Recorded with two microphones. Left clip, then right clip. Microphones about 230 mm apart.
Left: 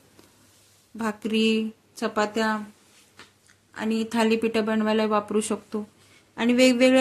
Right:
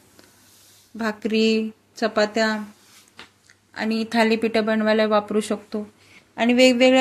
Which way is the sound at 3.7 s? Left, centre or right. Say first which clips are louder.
Right 4 dB; centre.